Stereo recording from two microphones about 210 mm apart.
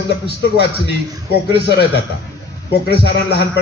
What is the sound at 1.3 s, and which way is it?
A man's voice, 50° left (ahead or behind).